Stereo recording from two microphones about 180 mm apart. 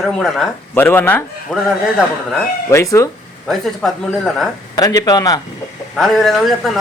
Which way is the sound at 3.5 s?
Centre (ahead or behind).